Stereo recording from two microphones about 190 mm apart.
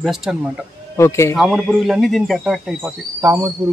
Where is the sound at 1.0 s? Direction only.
15° left (ahead or behind).